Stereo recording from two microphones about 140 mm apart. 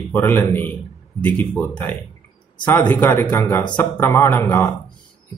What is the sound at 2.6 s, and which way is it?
Speech, 30° left (ahead or behind).